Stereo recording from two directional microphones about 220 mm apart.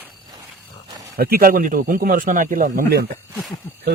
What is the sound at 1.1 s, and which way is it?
A man's voice, 40° right (ahead or behind).